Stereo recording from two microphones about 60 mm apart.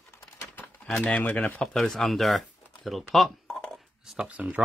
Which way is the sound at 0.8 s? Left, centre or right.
Centre.